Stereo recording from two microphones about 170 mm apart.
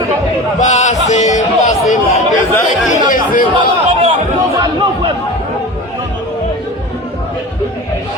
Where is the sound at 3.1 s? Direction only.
55° left (ahead or behind).